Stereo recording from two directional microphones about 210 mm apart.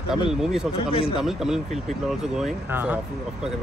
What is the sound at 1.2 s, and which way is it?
Speech, centre (ahead or behind).